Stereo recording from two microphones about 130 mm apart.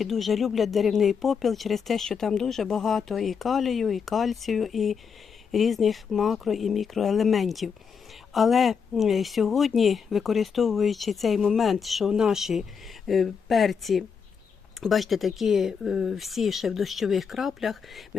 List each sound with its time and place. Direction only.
0.0 s speech: centre (ahead or behind)